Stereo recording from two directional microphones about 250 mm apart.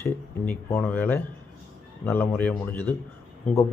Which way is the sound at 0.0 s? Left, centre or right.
Centre.